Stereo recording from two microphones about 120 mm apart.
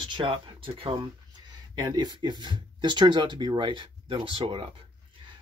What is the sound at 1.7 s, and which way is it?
Speech, 35° right (ahead or behind).